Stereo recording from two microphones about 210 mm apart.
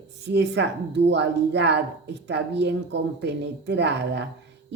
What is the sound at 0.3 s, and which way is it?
A woman's voice, 55° right (ahead or behind).